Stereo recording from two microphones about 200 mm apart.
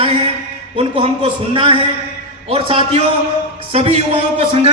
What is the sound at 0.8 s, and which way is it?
A man's voice, 25° right (ahead or behind).